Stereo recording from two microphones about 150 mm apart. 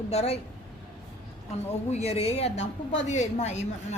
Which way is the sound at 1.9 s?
45° left (ahead or behind).